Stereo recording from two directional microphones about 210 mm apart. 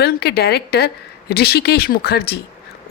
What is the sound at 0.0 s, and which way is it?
Speech, 50° left (ahead or behind).